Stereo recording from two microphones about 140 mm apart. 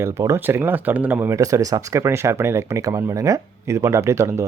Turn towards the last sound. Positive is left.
turn(degrees=-20)  # may be behind; listen again after turning